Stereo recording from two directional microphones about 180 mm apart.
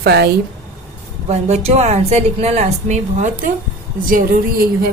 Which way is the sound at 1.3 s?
40° right (ahead or behind).